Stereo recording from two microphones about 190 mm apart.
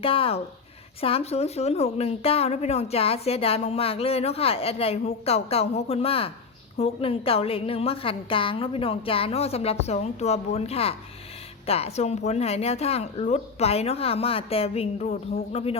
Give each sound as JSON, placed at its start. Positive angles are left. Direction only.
{"t": 0.0, "sound": "speech", "side_deg": 30}